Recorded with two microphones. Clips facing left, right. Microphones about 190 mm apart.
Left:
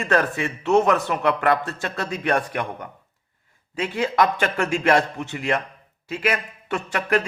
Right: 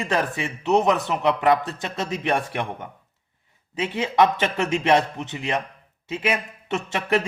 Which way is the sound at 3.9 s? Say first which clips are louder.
Right 1 dB; 20° right (ahead or behind).